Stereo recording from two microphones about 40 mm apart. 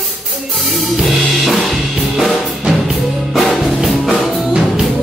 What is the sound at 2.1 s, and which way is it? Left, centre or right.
Music, centre.